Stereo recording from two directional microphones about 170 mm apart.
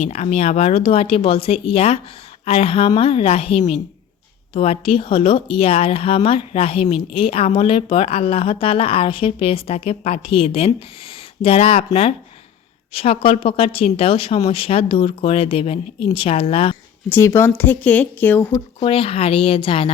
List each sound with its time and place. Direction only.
0.0 s speech: 40° left (ahead or behind)
12.9 s speech: 35° left (ahead or behind)
17.1 s speech: 15° left (ahead or behind)
18.5 s speech: 30° left (ahead or behind)